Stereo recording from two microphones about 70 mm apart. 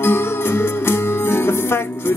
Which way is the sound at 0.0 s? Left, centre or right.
Left.